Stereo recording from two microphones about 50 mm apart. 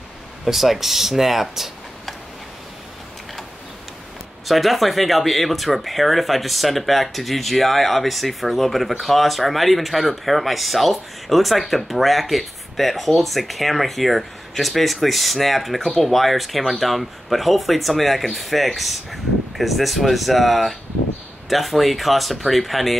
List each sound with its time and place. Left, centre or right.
0.5 s speech: centre
4.5 s speech: centre